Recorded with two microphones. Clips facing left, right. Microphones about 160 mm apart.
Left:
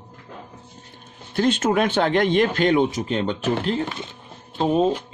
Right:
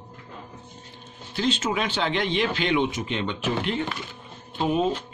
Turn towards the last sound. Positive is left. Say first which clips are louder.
# left 4 dB
turn(degrees=35)  # may be behind; listen again after turning